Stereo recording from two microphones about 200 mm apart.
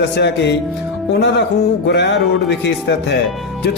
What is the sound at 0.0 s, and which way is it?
Speech, 60° left (ahead or behind).